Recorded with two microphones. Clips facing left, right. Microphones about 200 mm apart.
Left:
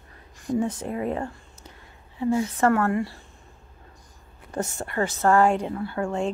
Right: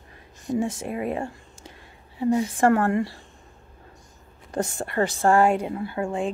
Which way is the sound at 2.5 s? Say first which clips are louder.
Right 2 dB; 30° right (ahead or behind).